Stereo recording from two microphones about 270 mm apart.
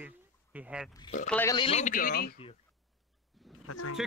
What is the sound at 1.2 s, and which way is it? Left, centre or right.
Speech, centre.